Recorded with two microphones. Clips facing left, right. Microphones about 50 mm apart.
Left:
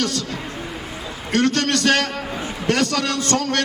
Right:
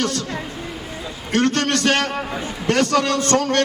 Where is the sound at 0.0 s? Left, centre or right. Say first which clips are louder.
Right 1 dB; right.